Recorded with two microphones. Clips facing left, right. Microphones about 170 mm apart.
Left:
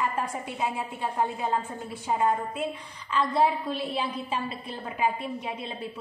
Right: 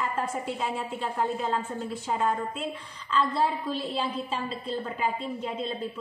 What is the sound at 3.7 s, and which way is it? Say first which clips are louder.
Speech: even; 60° left (ahead or behind).